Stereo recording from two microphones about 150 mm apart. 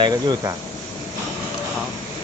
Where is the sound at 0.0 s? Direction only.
25° right (ahead or behind).